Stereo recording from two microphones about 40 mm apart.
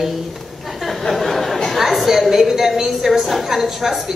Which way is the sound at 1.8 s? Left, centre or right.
Centre.